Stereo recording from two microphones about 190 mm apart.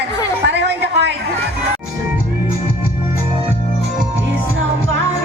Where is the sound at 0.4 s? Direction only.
65° right (ahead or behind).